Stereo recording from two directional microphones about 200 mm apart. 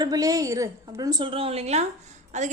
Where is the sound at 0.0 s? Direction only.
20° right (ahead or behind).